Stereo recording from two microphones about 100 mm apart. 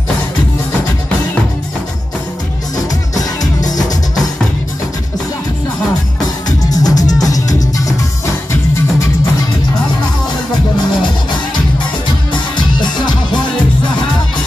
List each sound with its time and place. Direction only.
3.2 s music: 40° left (ahead or behind)
6.6 s music: 40° left (ahead or behind)
12.5 s music: 50° left (ahead or behind)